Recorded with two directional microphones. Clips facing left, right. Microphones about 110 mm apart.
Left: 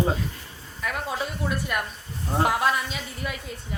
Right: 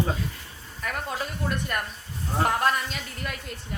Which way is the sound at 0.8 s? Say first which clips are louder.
Left 2 dB; centre (ahead or behind).